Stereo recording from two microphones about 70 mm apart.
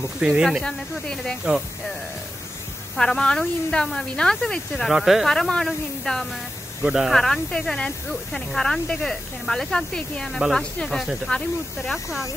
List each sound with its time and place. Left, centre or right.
0.2 s speech: centre
0.5 s speech: centre
1.4 s speech: centre
3.0 s speech: centre
6.8 s speech: centre
7.2 s speech: centre
11.9 s speech: centre